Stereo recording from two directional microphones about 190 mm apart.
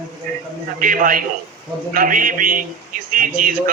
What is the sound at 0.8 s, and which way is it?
A man's voice, 45° right (ahead or behind).